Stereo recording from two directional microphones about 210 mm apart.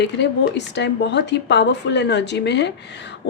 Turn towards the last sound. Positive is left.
turn(degrees=55)  # may be behind; listen again after turning